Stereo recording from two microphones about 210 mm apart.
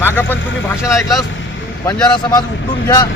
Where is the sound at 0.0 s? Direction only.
10° left (ahead or behind).